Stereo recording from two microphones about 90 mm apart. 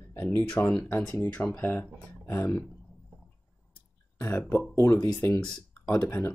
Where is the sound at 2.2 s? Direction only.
30° left (ahead or behind).